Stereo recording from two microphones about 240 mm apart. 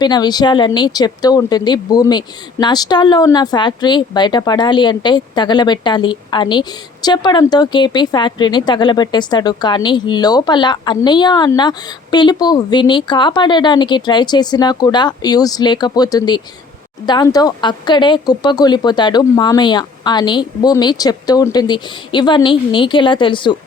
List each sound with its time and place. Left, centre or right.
0.0 s speech: centre